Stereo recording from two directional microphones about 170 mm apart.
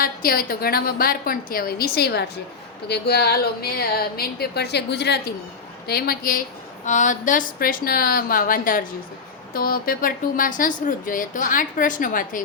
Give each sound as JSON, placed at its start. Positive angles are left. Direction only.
{"t": 0.0, "sound": "a woman's voice", "side_deg": 60}
{"t": 5.9, "sound": "a woman's voice", "side_deg": 60}
{"t": 6.8, "sound": "a woman's voice", "side_deg": 45}